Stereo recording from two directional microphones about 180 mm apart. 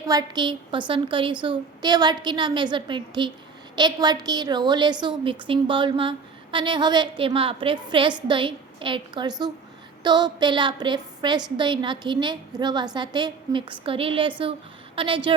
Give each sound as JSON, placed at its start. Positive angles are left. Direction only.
{"t": 0.1, "sound": "a woman's voice", "side_deg": -25}